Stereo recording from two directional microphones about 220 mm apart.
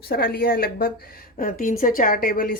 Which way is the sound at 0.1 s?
45° left (ahead or behind).